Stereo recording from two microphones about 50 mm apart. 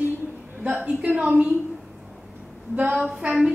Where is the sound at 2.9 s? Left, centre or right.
Centre.